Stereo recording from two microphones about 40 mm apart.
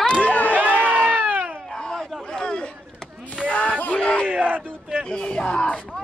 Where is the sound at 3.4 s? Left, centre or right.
Left.